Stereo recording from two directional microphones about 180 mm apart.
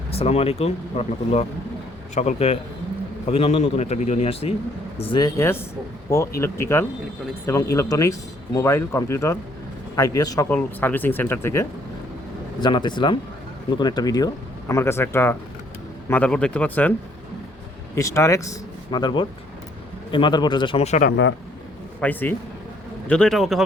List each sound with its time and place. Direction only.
0.1 s a man's voice: 35° left (ahead or behind); by 11.6 s 15° left (ahead or behind)
12.6 s a man's voice: 25° left (ahead or behind); by 16.9 s 10° left (ahead or behind)
17.9 s a man's voice: 15° left (ahead or behind); by 21.1 s 40° left (ahead or behind)
22.0 s a man's voice: 10° left (ahead or behind)